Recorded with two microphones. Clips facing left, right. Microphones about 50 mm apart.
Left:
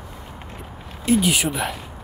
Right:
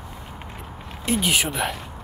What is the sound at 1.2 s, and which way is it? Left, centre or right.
Speech, right.